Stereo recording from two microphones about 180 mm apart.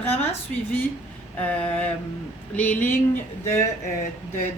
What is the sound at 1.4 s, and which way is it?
Speech, 10° left (ahead or behind).